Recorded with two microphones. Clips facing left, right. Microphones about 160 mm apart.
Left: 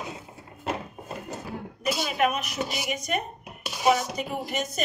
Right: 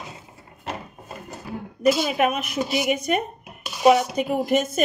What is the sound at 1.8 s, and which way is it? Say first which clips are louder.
A woman's voice: right 6 dB; 50° right (ahead or behind).